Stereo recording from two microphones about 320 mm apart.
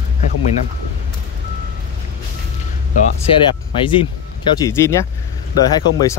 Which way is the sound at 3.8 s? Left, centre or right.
Centre.